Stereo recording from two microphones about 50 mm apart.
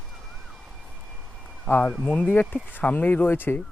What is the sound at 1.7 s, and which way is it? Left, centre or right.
Speech, left.